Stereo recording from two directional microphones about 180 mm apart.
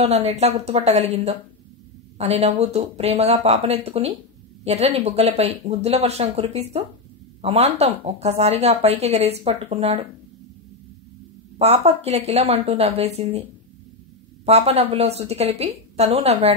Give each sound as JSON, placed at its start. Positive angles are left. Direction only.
{"t": 0.0, "sound": "speech", "side_deg": -35}
{"t": 11.5, "sound": "speech", "side_deg": -35}
{"t": 14.4, "sound": "speech", "side_deg": -35}